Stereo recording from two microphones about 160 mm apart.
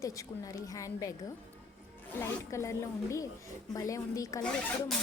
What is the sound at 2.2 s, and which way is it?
A woman's voice, 20° left (ahead or behind).